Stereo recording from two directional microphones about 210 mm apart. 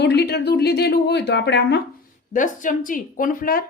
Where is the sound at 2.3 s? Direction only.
40° left (ahead or behind).